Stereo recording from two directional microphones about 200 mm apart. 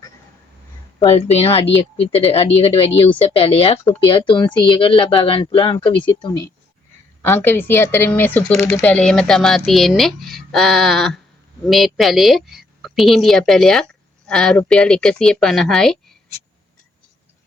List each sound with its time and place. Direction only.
0.9 s speech: 30° left (ahead or behind)
7.2 s speech: 10° left (ahead or behind)